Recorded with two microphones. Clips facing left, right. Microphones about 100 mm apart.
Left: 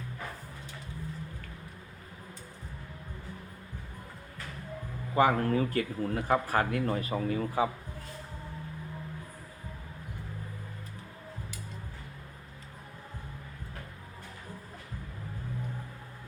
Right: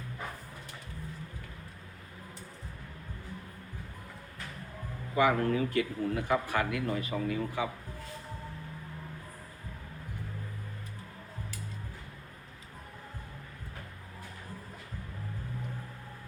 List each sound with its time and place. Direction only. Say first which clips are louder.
5.1 s speech: left 1 dB; 40° left (ahead or behind)